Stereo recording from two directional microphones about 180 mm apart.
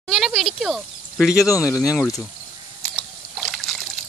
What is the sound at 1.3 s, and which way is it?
Speech, 20° left (ahead or behind).